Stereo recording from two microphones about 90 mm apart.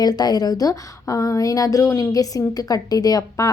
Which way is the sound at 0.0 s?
50° left (ahead or behind).